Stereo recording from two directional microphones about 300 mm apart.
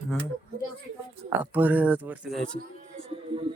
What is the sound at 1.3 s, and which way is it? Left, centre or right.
Speech, centre.